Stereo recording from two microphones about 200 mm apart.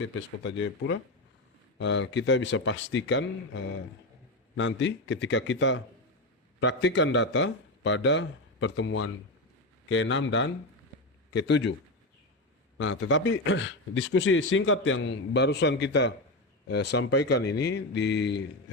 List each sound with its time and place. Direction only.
0.0 s a man's voice: 65° left (ahead or behind)
9.9 s a man's voice: 70° left (ahead or behind)
12.7 s a man's voice: 70° left (ahead or behind)